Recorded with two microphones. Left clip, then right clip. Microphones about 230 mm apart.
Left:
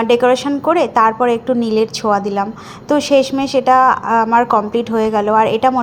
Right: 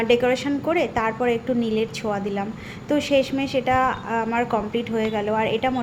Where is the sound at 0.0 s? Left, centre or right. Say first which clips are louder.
Left 7 dB; centre.